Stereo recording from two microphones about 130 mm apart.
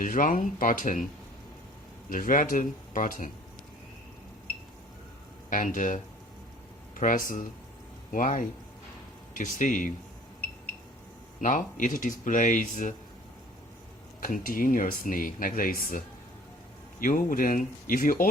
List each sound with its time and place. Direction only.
0.0 s speech: 90° left
2.0 s speech: 90° left
5.7 s speech: 80° left
6.9 s speech: 90° left
11.3 s speech: 80° left
12.2 s speech: 80° left
14.2 s speech: 90° left